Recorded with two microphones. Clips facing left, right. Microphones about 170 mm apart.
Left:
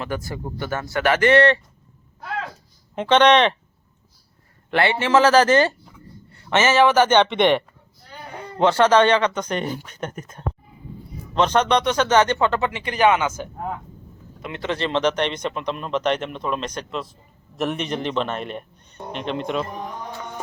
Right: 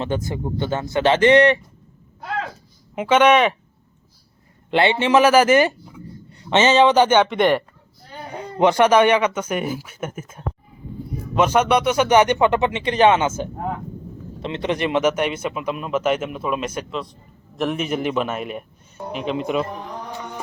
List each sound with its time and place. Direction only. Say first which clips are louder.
0.0 s speech: right 4 dB; 20° right (ahead or behind)
2.9 s speech: even; 10° right (ahead or behind)
4.7 s speech: right 2 dB; 20° right (ahead or behind); by 7.6 s centre (ahead or behind)
8.3 s a man's voice: right 2 dB; 15° right (ahead or behind)